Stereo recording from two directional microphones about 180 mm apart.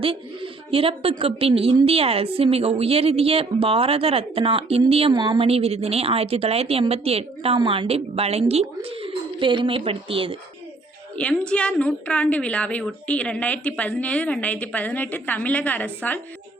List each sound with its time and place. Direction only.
0.0 s speech: 30° right (ahead or behind)
11.2 s a woman's voice: 5° left (ahead or behind)